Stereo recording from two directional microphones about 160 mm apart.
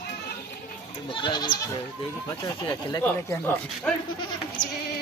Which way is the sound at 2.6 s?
15° left (ahead or behind).